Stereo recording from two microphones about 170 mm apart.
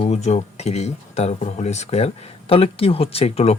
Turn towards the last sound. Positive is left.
turn(degrees=35)  # may be behind; listen again after turning